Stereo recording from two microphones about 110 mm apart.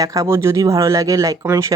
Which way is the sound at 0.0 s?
30° right (ahead or behind).